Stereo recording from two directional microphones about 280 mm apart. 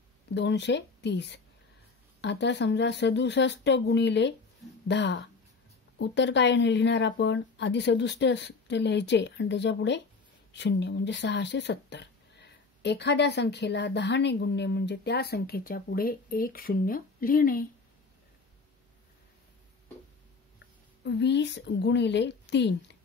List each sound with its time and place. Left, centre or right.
0.3 s speech: left
20.5 s speech: left